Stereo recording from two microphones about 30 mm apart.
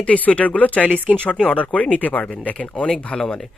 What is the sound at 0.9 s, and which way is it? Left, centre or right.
Speech, right.